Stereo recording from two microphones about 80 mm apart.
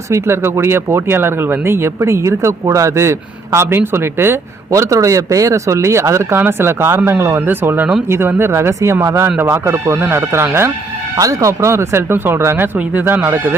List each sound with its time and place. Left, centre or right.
0.1 s speech: right
4.7 s speech: right
11.2 s speech: right